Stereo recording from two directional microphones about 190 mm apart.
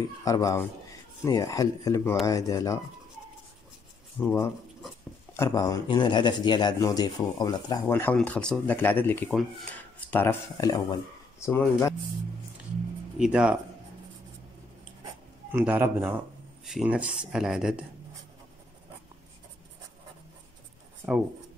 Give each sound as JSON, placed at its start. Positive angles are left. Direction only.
{"t": 0.2, "sound": "speech", "side_deg": 15}
{"t": 4.2, "sound": "speech", "side_deg": 10}
{"t": 13.2, "sound": "speech", "side_deg": -5}
{"t": 15.5, "sound": "a man's voice", "side_deg": -10}
{"t": 21.0, "sound": "speech", "side_deg": 10}